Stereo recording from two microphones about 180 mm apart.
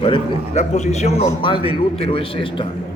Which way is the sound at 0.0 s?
30° left (ahead or behind).